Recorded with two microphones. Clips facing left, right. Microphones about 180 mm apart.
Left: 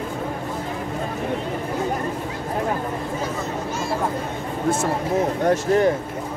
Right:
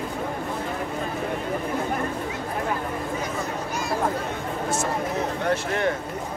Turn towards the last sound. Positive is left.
turn(degrees=40)  # may be behind; listen again after turning